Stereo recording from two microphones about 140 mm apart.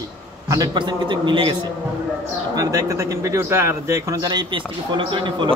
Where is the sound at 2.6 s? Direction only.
25° right (ahead or behind).